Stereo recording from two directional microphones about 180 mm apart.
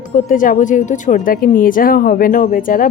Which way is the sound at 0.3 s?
50° left (ahead or behind).